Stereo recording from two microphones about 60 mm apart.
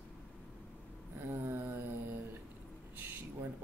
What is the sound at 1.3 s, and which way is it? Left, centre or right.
Speech, right.